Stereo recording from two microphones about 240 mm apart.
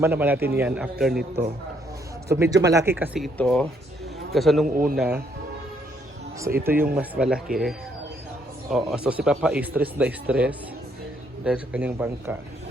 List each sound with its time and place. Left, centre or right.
0.0 s a man's voice: centre
2.3 s a man's voice: centre
4.6 s a man's voice: right
4.9 s speech: centre
6.9 s a man's voice: centre